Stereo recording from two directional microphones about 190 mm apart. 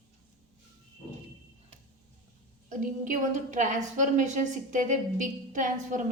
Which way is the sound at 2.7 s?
40° right (ahead or behind).